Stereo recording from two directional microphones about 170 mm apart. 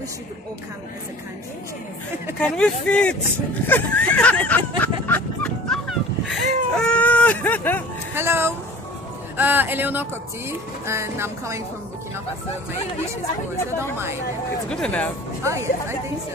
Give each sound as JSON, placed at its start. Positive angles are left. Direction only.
{"t": 2.4, "sound": "speech", "side_deg": 5}
{"t": 4.5, "sound": "a sound", "side_deg": 10}
{"t": 8.2, "sound": "speech", "side_deg": -15}
{"t": 13.9, "sound": "speech", "side_deg": -15}
{"t": 14.7, "sound": "speech", "side_deg": 5}
{"t": 15.4, "sound": "speech", "side_deg": -15}